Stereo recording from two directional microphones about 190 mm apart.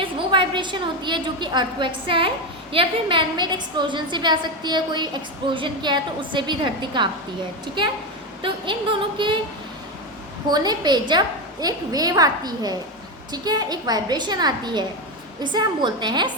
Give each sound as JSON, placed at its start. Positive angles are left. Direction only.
{"t": 0.0, "sound": "a woman's voice", "side_deg": -25}
{"t": 10.5, "sound": "a woman's voice", "side_deg": -20}